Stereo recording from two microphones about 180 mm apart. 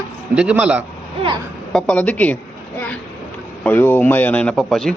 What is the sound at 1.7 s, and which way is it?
Speech, 5° left (ahead or behind).